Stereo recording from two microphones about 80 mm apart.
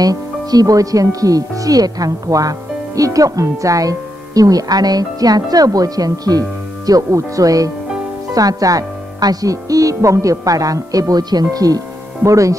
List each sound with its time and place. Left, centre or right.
0.0 s speech: right